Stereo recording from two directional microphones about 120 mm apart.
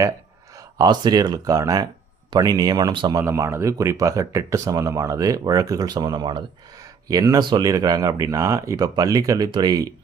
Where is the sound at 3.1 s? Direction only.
25° right (ahead or behind).